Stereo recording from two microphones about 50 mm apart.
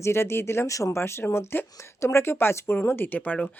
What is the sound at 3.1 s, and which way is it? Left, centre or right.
Speech, left.